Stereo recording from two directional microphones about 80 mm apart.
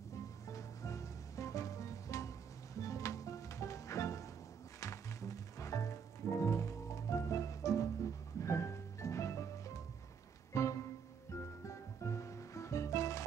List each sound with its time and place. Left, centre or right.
0.5 s music: left
10.5 s music: left